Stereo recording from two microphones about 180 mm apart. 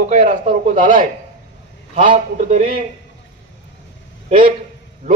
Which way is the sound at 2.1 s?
40° right (ahead or behind).